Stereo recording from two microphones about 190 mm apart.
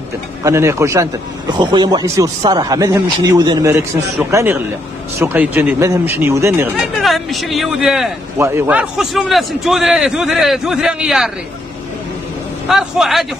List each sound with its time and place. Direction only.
0.4 s speech: 15° right (ahead or behind)
7.0 s a man's voice: centre (ahead or behind)
12.6 s a man's voice: centre (ahead or behind)